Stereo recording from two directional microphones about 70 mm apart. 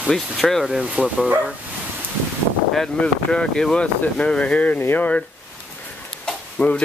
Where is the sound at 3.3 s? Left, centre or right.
Centre; by 5.1 s left.